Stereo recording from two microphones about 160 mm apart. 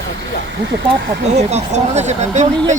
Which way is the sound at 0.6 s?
90° right.